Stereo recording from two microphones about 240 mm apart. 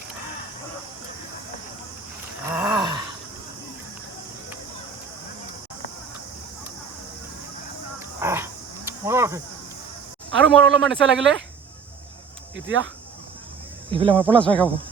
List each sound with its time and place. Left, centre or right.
2.5 s groan: centre
7.9 s livestock: centre
10.3 s speech: centre
12.6 s speech: right
13.9 s speech: right
14.3 s speech: centre